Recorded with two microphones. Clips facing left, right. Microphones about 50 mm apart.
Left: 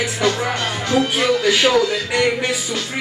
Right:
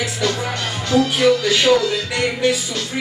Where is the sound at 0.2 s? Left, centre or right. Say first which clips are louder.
Left 4 dB; left.